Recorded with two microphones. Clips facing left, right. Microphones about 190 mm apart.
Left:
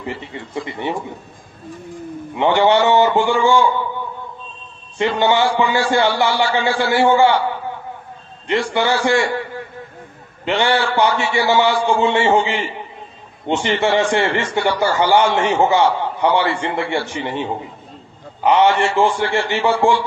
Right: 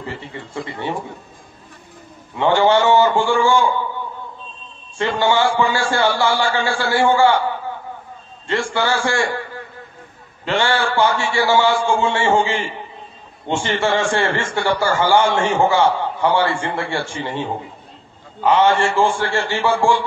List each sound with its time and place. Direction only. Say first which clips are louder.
0.0 s a man's voice: left 2 dB; 20° left (ahead or behind)
2.3 s a man's voice: left 1 dB; 20° left (ahead or behind)
4.9 s a man's voice: left 1 dB; 20° left (ahead or behind)
8.5 s a man's voice: left 2 dB; 20° left (ahead or behind)
10.4 s a man's voice: left 2 dB; 20° left (ahead or behind)